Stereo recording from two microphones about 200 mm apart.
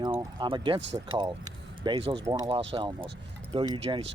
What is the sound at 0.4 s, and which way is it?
Speech, 25° right (ahead or behind).